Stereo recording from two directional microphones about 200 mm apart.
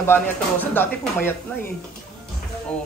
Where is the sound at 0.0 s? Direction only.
10° left (ahead or behind).